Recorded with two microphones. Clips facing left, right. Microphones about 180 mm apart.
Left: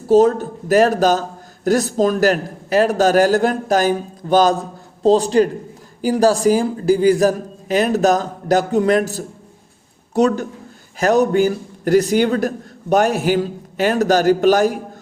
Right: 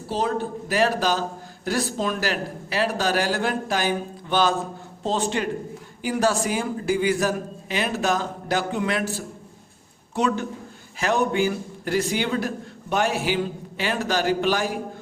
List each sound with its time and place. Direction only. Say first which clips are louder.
0.1 s a man's voice: left 12 dB; 45° left (ahead or behind)